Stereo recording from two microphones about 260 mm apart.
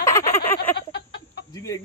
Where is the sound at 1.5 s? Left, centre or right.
Centre.